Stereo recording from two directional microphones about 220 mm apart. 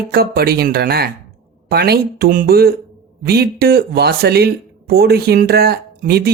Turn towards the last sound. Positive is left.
turn(degrees=-45)  # may be behind; listen again after turning